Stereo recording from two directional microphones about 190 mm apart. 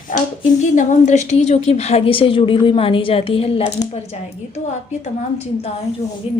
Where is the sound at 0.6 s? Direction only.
40° left (ahead or behind).